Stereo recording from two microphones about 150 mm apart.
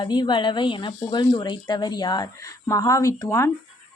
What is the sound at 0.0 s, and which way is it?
Speech, 30° left (ahead or behind).